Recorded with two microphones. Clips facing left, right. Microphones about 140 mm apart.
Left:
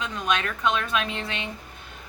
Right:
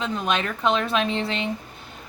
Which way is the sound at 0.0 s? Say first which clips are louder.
Right 2 dB; 30° right (ahead or behind).